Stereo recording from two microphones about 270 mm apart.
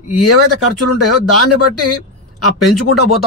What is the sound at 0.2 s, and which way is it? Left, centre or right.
Speech, left.